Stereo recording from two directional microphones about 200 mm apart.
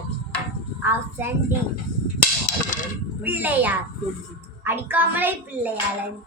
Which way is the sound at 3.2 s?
10° right (ahead or behind).